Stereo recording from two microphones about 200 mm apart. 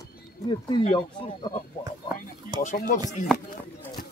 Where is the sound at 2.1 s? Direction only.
40° left (ahead or behind).